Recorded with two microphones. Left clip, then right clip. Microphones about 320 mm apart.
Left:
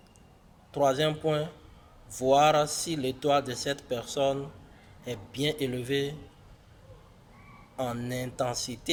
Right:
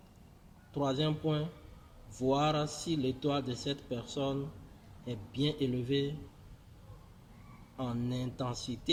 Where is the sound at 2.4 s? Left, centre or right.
Centre.